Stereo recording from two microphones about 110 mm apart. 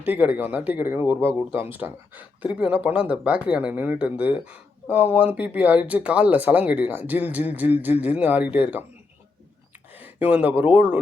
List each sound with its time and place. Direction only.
0.0 s speech: 15° right (ahead or behind)
9.9 s speech: 15° right (ahead or behind)